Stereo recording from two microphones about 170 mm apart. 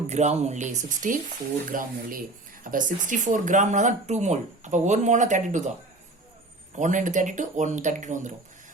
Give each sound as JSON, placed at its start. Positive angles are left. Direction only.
{"t": 0.1, "sound": "speech", "side_deg": -40}
{"t": 6.7, "sound": "speech", "side_deg": -45}